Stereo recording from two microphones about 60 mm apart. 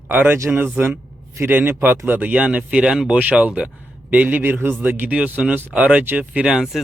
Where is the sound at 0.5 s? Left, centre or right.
Right.